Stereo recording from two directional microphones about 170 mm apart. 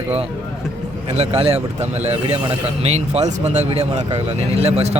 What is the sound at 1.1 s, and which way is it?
Speech, 35° right (ahead or behind).